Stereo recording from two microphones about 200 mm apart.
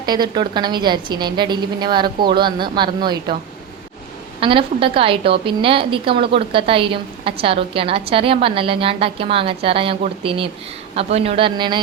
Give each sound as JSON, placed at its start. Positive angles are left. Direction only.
{"t": 0.0, "sound": "a woman's voice", "side_deg": -20}
{"t": 4.4, "sound": "a woman's voice", "side_deg": -25}